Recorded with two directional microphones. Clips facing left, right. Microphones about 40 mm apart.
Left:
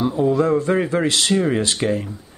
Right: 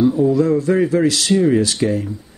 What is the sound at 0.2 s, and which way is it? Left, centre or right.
Speech, left.